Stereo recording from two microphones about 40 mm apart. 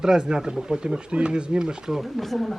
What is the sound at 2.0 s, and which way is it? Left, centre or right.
Speech, centre.